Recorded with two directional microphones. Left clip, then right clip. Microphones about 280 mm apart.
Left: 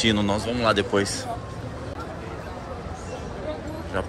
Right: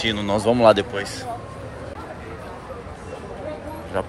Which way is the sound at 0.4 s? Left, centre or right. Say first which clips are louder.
Right 7 dB; centre.